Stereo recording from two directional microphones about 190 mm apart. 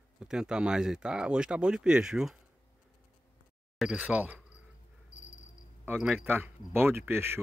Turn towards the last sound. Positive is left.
turn(degrees=-10)  # may be behind; listen again after turning